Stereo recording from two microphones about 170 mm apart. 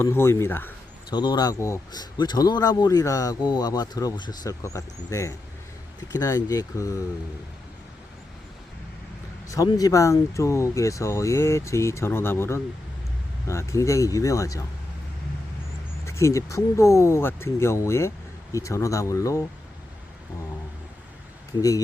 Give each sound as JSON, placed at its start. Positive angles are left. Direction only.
{"t": 0.0, "sound": "speech", "side_deg": 15}
{"t": 1.1, "sound": "a man's voice", "side_deg": 25}
{"t": 9.5, "sound": "a man's voice", "side_deg": 20}
{"t": 16.0, "sound": "a man's voice", "side_deg": 15}